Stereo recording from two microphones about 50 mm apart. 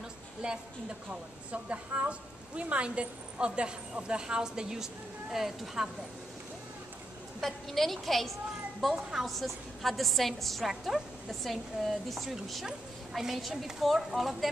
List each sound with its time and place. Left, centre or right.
0.4 s a woman's voice: centre
7.3 s a woman's voice: centre